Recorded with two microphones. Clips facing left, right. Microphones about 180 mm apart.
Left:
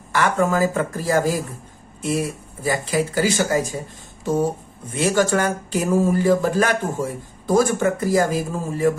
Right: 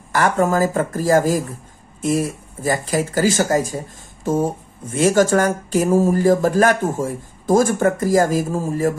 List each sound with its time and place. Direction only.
0.1 s speech: 40° right (ahead or behind)
4.2 s a sound: 45° right (ahead or behind)
4.9 s speech: 45° right (ahead or behind)